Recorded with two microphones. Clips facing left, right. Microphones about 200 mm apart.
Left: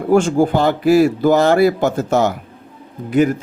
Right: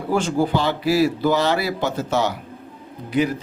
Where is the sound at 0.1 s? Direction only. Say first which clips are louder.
Left 6 dB; 50° left (ahead or behind).